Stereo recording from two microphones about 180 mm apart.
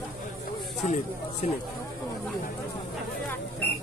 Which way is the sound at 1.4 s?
40° left (ahead or behind).